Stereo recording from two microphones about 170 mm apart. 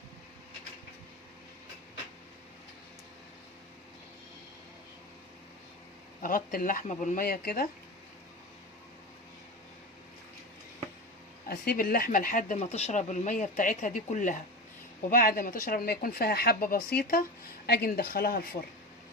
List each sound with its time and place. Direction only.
6.2 s speech: 55° left (ahead or behind)
11.4 s speech: 60° left (ahead or behind)